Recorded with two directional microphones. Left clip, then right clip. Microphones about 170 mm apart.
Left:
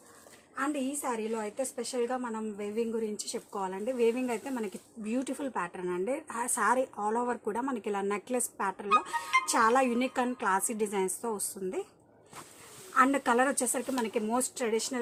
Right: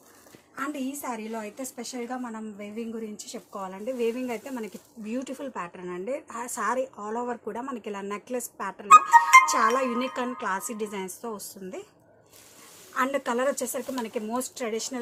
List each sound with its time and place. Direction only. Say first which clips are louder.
0.5 s a woman's voice: even; 15° left (ahead or behind)
8.9 s music: right 14 dB; 50° right (ahead or behind)
9.5 s a woman's voice: right 2 dB; 25° left (ahead or behind)
12.9 s speech: left 1 dB; 35° left (ahead or behind)